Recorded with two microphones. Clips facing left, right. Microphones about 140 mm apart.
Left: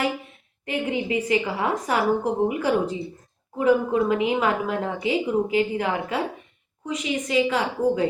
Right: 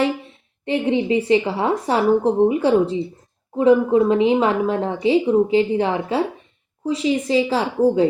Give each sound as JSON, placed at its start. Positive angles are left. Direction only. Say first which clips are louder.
{"t": 0.6, "sound": "a woman's voice", "louder": "right 6 dB", "side_deg": -30}